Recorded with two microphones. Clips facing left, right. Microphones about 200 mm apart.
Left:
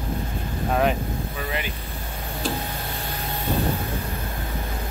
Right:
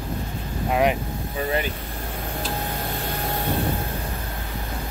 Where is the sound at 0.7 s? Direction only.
15° right (ahead or behind).